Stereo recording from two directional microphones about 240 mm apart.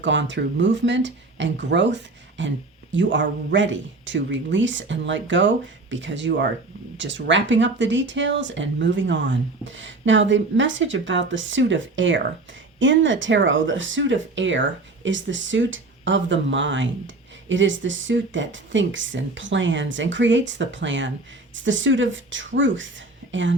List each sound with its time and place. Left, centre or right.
0.0 s speech: right